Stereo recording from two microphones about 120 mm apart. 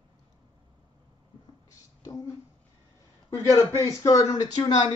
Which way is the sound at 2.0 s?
30° left (ahead or behind).